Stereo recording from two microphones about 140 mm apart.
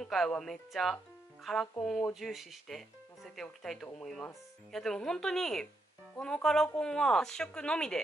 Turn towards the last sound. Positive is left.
turn(degrees=5)  # may be behind; listen again after turning